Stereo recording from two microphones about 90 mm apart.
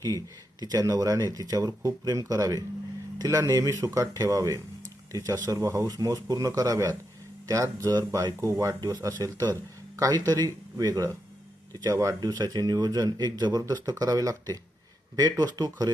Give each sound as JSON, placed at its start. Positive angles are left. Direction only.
{"t": 0.0, "sound": "speech", "side_deg": -45}